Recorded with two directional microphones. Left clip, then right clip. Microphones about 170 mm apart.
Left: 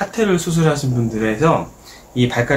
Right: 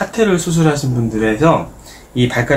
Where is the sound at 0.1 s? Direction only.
25° left (ahead or behind).